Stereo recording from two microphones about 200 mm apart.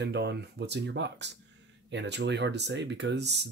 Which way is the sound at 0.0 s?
60° right (ahead or behind).